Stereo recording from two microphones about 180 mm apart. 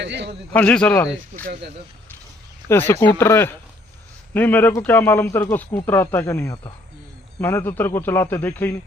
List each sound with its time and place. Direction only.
0.0 s a man's voice: 80° right
0.5 s a man's voice: 5° left (ahead or behind)
2.6 s a man's voice: 10° left (ahead or behind)